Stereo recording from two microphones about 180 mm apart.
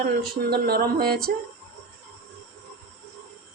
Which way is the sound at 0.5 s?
60° right (ahead or behind).